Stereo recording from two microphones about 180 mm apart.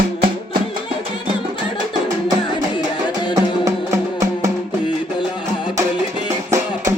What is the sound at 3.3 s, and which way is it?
Music, 20° right (ahead or behind).